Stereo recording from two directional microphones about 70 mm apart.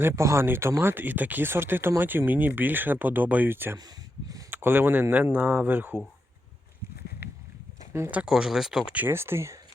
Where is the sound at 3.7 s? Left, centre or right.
Right.